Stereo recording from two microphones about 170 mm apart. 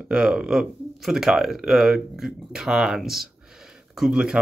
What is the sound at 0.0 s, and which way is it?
Speech, 5° right (ahead or behind).